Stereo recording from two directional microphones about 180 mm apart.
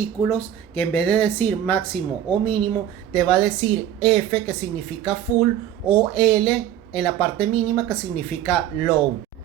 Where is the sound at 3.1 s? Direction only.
5° left (ahead or behind).